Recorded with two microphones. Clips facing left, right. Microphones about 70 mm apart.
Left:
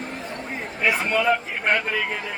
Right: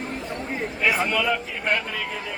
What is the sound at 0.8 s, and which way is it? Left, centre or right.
Speech, left.